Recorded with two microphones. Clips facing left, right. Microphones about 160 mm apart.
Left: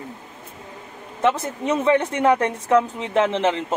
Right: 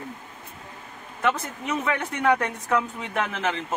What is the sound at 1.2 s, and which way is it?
A woman's voice, 25° left (ahead or behind).